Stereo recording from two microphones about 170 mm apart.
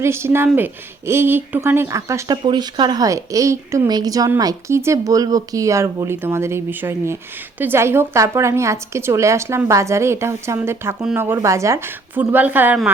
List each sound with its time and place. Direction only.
0.0 s a woman's voice: 15° right (ahead or behind)